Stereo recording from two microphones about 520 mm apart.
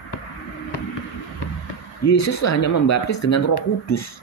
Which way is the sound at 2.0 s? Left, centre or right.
Left.